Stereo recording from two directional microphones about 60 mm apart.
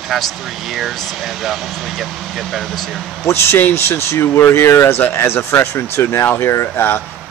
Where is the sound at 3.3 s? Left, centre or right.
Left.